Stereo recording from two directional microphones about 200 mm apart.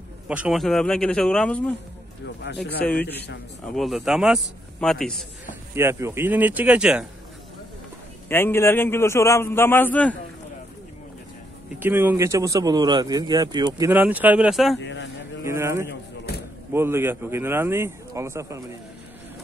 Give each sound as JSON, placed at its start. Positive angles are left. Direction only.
{"t": 0.3, "sound": "a man's voice", "side_deg": -5}
{"t": 2.2, "sound": "speech", "side_deg": 60}
{"t": 2.8, "sound": "a man's voice", "side_deg": 5}
{"t": 5.8, "sound": "speech", "side_deg": -15}
{"t": 8.3, "sound": "a man's voice", "side_deg": 10}
{"t": 11.8, "sound": "speech", "side_deg": -10}
{"t": 14.8, "sound": "speech", "side_deg": 60}
{"t": 15.4, "sound": "speech", "side_deg": -15}